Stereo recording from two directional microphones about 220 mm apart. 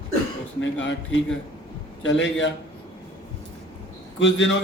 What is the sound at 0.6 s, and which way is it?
A man's voice, 55° left (ahead or behind).